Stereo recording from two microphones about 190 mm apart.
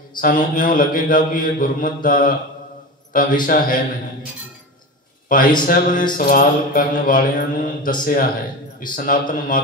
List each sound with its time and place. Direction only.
0.2 s mantra: 45° left (ahead or behind)
3.1 s a man's voice: 45° left (ahead or behind)
3.4 s mantra: 45° left (ahead or behind)
5.3 s mantra: 45° left (ahead or behind)